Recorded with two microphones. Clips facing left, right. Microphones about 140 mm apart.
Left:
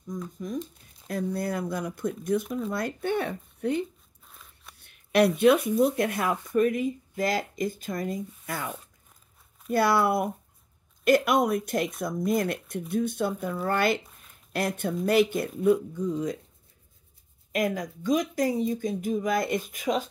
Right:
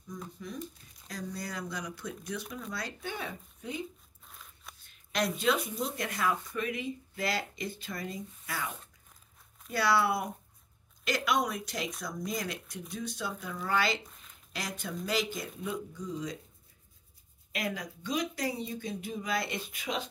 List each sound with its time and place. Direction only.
1.0 s speech: 55° left (ahead or behind)
4.3 s a sound: centre (ahead or behind)
4.7 s speech: 65° left (ahead or behind)
17.5 s speech: 45° left (ahead or behind)